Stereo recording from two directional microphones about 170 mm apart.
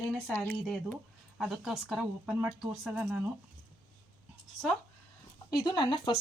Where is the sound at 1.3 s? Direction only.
Centre (ahead or behind).